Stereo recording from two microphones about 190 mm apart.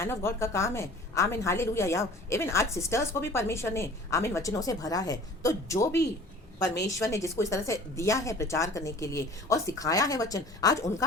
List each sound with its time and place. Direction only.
0.0 s a woman's voice: 15° left (ahead or behind)